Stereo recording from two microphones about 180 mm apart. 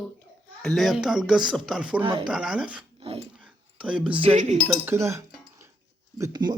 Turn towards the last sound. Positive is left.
turn(degrees=-25)  # may be behind; listen again after turning